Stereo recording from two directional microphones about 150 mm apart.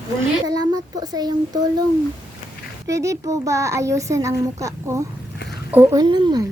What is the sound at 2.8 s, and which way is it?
A child's voice, 20° right (ahead or behind).